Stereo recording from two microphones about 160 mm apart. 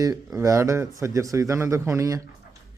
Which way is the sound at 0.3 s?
15° right (ahead or behind).